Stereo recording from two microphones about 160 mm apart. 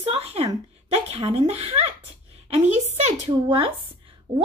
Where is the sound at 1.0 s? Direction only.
40° right (ahead or behind).